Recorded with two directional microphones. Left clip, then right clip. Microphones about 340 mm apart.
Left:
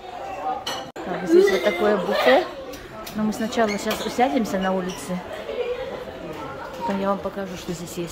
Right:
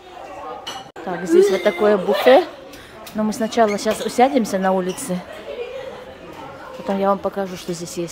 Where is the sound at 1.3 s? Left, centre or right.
Centre.